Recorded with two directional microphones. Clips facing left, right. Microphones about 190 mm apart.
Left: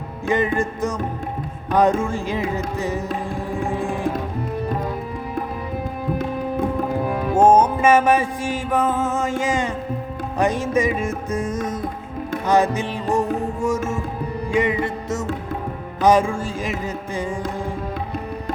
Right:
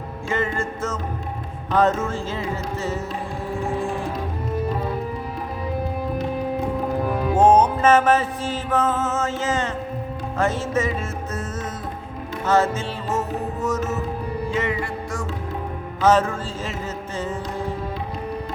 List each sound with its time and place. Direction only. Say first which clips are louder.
0.3 s music: left 5 dB; 15° left (ahead or behind)
7.3 s music: left 1 dB; 10° left (ahead or behind)